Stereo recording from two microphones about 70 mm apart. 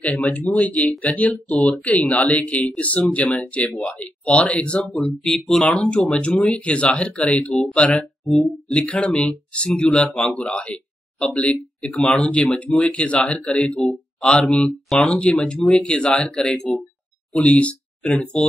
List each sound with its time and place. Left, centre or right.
0.5 s speech: left
0.7 s speech: centre
1.0 s speech: left
4.8 s speech: centre
15.0 s speech: centre
17.3 s a sound: centre
18.1 s speech: centre